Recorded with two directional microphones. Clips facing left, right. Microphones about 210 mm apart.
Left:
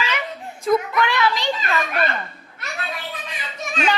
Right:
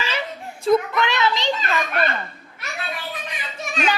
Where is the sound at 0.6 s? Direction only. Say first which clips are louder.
Right 1 dB; 25° right (ahead or behind).